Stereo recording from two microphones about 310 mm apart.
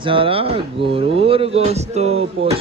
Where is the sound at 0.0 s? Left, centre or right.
Centre.